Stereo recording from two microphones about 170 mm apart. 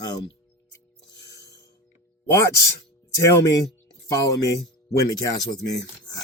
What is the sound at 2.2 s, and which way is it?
Speech, 15° left (ahead or behind).